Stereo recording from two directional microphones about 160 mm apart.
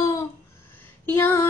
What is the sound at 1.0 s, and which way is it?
Female singing, 15° left (ahead or behind).